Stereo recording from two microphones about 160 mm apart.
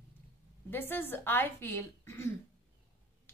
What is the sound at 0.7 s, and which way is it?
Speech, 15° left (ahead or behind).